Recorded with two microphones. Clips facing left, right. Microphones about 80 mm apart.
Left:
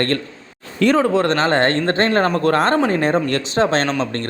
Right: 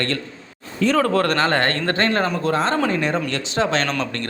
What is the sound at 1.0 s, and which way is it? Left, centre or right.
Speech, centre.